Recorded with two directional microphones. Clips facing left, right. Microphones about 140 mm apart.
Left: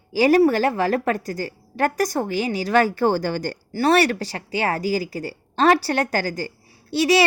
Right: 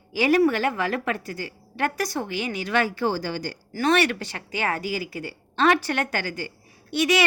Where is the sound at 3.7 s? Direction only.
35° left (ahead or behind).